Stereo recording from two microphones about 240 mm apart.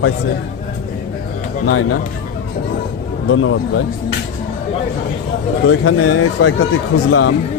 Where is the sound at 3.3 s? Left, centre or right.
Left.